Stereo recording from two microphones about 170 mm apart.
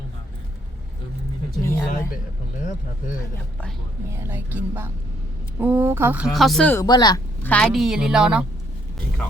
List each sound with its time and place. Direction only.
1.6 s speech: 15° left (ahead or behind)
3.3 s speech: 5° left (ahead or behind)
4.2 s speech: 10° right (ahead or behind)
6.7 s speech: 25° left (ahead or behind)
7.4 s a woman's voice: 5° left (ahead or behind)